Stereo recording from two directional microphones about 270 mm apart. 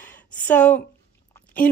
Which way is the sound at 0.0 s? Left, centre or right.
Centre.